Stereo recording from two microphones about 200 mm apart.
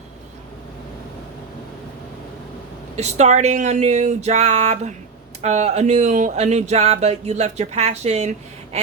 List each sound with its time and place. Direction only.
2.9 s speech: 35° right (ahead or behind)